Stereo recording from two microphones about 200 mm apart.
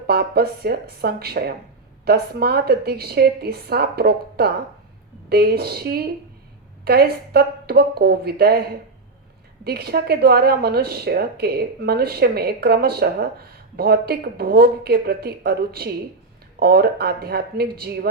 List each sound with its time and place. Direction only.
0.1 s a woman's voice: 50° right (ahead or behind)